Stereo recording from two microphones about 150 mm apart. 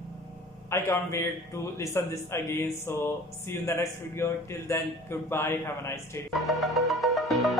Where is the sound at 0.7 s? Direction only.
20° left (ahead or behind).